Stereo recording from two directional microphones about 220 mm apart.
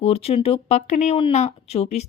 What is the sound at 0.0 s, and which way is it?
A woman's voice, 25° left (ahead or behind).